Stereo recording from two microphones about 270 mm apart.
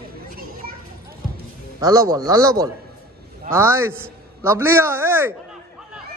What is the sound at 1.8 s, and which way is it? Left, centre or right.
A man's voice, centre.